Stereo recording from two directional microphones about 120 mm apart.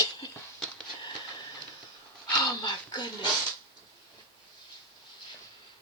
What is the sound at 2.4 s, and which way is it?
Speech, 30° left (ahead or behind).